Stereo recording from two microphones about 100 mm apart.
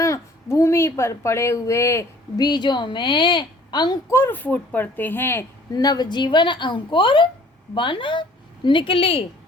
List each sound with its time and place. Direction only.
0.0 s speech: 30° left (ahead or behind)
2.4 s a woman's voice: 50° left (ahead or behind)
4.1 s speech: 20° left (ahead or behind)
5.7 s a woman's voice: 40° left (ahead or behind); by 9.2 s 65° left (ahead or behind)